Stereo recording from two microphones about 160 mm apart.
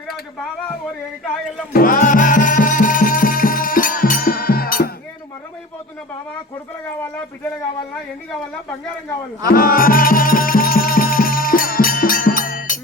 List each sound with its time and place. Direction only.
1.7 s music: 60° left (ahead or behind)
9.5 s music: 65° left (ahead or behind)